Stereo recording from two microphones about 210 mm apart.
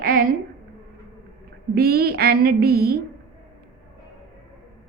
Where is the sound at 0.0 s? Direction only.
45° right (ahead or behind).